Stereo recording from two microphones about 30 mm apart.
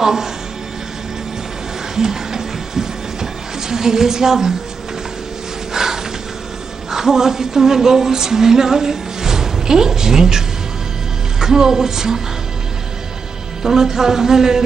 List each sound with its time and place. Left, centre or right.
0.0 s speech: centre
2.0 s a sound: centre
5.7 s a sound: centre
6.9 s female singing: centre
11.3 s a woman's voice: centre
13.6 s a woman's voice: centre